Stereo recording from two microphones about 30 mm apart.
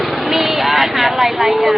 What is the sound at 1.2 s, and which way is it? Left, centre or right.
Speech, right.